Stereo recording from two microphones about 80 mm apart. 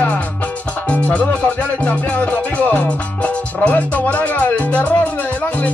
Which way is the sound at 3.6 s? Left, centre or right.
Centre.